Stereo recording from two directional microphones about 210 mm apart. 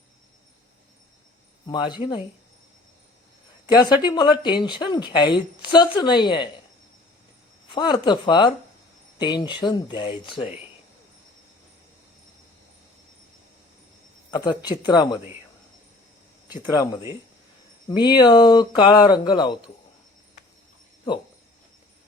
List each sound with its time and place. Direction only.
1.6 s speech: 20° left (ahead or behind)
3.8 s speech: 20° left (ahead or behind)
7.7 s speech: 20° left (ahead or behind)
14.3 s speech: 20° left (ahead or behind)
16.5 s speech: 15° left (ahead or behind)